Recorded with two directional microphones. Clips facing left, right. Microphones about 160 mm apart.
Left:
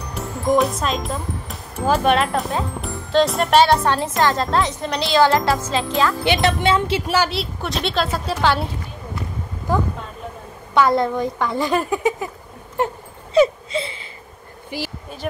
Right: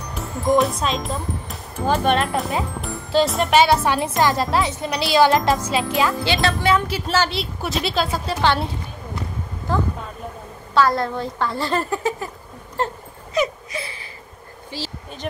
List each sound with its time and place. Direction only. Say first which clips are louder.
0.1 s speech: even; centre (ahead or behind)
4.2 s music: even; 10° right (ahead or behind)
6.2 s music: left 2 dB; 20° left (ahead or behind)
7.2 s a woman's voice: left 1 dB; centre (ahead or behind)
10.7 s a woman's voice: left 2 dB; 20° left (ahead or behind)
12.8 s dog: left 2 dB; 15° left (ahead or behind)
13.3 s wail: left 7 dB; 25° left (ahead or behind)
14.7 s speech: left 3 dB; 15° left (ahead or behind)